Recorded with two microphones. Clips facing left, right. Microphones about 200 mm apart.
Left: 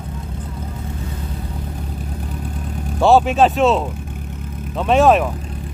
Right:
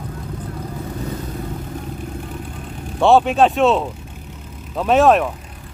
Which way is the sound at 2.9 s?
Centre (ahead or behind).